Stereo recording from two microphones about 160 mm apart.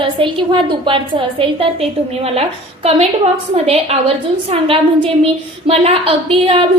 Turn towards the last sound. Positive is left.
turn(degrees=-35)  # may be behind; listen again after turning